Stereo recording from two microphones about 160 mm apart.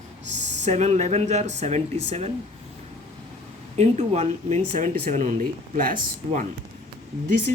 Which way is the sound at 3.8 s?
45° right (ahead or behind).